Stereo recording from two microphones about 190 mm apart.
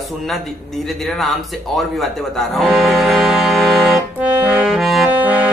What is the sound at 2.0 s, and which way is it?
Music, centre (ahead or behind).